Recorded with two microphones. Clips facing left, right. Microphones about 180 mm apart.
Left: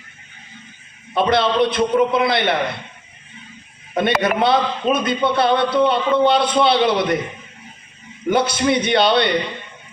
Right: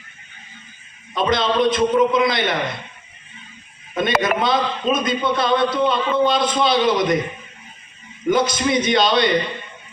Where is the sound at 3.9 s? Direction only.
60° left (ahead or behind).